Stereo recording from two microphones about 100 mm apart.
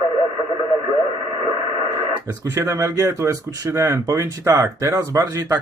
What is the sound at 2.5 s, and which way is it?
Speech, 30° right (ahead or behind).